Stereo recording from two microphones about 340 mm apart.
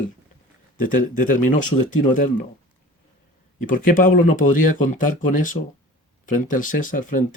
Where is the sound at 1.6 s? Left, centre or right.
Left.